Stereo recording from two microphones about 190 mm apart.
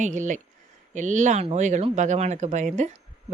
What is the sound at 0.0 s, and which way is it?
Speech, 40° right (ahead or behind).